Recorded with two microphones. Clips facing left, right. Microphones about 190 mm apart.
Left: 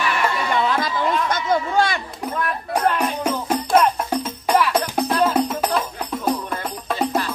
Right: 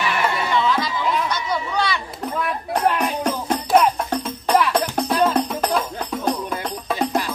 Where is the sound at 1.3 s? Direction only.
50° left (ahead or behind).